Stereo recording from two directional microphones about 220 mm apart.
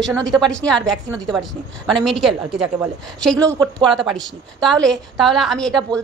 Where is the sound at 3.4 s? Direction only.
20° right (ahead or behind).